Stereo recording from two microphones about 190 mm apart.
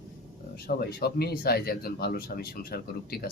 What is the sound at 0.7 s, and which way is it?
Speech, 50° left (ahead or behind).